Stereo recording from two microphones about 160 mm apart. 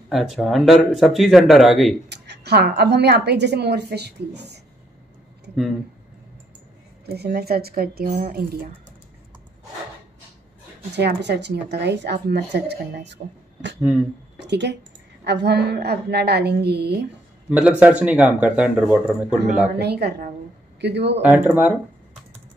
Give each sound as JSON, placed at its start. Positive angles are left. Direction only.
{"t": 0.1, "sound": "speech", "side_deg": 0}
{"t": 2.0, "sound": "speech", "side_deg": -90}
{"t": 7.1, "sound": "a woman's voice", "side_deg": -75}
{"t": 10.9, "sound": "speech", "side_deg": -90}
{"t": 17.5, "sound": "speech", "side_deg": -5}
{"t": 19.8, "sound": "speech", "side_deg": -90}
{"t": 21.2, "sound": "speech", "side_deg": -10}